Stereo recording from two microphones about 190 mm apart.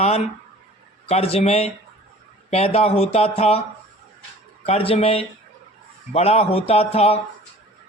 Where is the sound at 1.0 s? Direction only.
30° left (ahead or behind).